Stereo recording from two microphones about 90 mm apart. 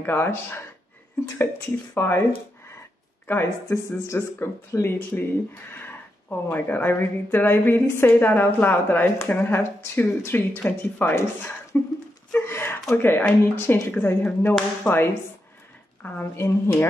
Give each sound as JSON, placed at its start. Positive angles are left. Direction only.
{"t": 0.0, "sound": "a woman's voice", "side_deg": 25}
{"t": 2.0, "sound": "a woman's voice", "side_deg": 25}
{"t": 3.3, "sound": "a woman's voice", "side_deg": 25}